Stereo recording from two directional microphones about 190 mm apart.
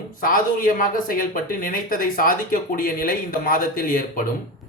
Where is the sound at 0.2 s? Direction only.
45° left (ahead or behind).